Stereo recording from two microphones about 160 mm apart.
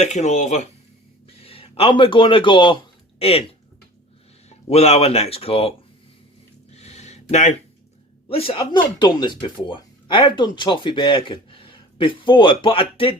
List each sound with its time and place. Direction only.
0.0 s speech: 45° left (ahead or behind)
1.4 s speech: 35° left (ahead or behind)
4.4 s speech: 40° left (ahead or behind)
6.7 s a sound: 45° left (ahead or behind)
8.3 s speech: 35° left (ahead or behind)